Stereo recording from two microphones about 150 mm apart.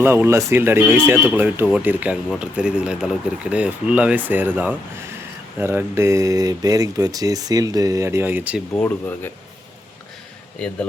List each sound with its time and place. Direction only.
0.0 s speech: 15° right (ahead or behind)
8.7 s speech: 10° left (ahead or behind)